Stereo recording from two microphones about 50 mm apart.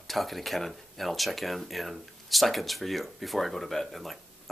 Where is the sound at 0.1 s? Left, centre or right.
Centre.